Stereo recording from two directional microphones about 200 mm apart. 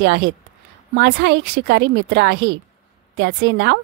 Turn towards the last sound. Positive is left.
turn(degrees=-55)  # may be behind; listen again after turning